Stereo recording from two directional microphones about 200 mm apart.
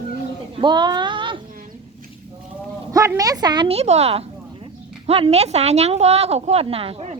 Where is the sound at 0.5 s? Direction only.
20° right (ahead or behind).